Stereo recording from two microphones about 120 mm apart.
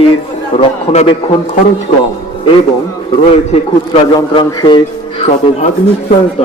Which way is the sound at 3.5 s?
50° left (ahead or behind).